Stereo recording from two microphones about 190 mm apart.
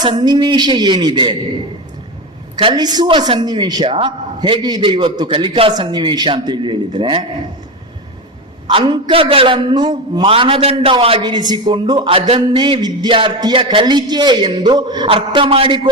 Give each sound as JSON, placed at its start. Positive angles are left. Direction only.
{"t": 0.0, "sound": "a man's voice", "side_deg": -20}
{"t": 2.6, "sound": "a man's voice", "side_deg": -25}
{"t": 8.6, "sound": "a man's voice", "side_deg": -25}